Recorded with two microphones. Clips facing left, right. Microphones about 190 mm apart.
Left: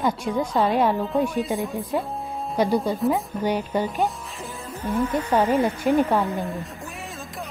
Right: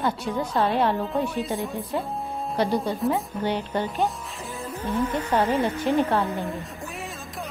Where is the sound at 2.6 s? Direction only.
10° left (ahead or behind).